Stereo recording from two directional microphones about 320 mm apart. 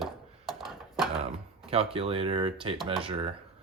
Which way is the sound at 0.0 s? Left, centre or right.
Centre.